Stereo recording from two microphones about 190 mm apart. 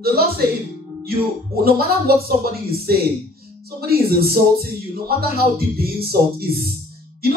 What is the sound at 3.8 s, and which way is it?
Speech, 55° right (ahead or behind).